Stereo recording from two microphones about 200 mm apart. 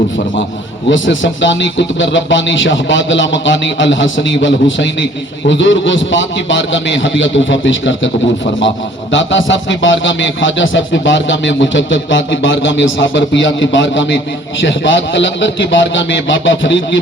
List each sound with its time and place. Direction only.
0.9 s a man's voice: 70° left (ahead or behind)
9.5 s a man's voice: 70° left (ahead or behind)